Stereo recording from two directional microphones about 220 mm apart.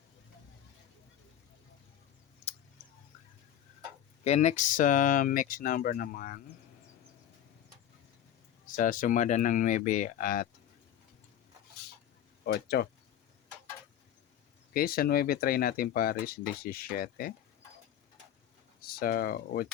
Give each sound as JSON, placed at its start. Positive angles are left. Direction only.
{"t": 4.2, "sound": "speech", "side_deg": 30}
{"t": 8.6, "sound": "speech", "side_deg": 35}
{"t": 12.5, "sound": "speech", "side_deg": 45}
{"t": 14.7, "sound": "speech", "side_deg": 40}
{"t": 18.9, "sound": "speech", "side_deg": 40}